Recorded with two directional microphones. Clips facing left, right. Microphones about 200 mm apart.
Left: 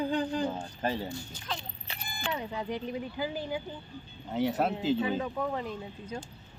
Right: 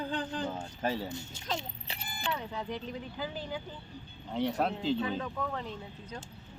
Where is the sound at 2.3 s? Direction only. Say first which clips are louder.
Left 3 dB; 15° left (ahead or behind).